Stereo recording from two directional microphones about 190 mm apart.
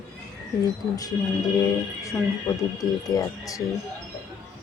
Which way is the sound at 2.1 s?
15° left (ahead or behind).